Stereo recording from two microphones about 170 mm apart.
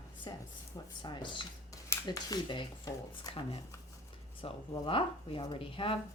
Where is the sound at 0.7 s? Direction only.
25° left (ahead or behind).